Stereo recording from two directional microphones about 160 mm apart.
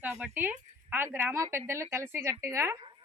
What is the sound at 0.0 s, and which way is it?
A woman's voice, 10° right (ahead or behind).